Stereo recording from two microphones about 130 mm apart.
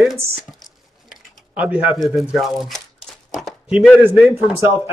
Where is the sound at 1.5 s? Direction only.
10° right (ahead or behind).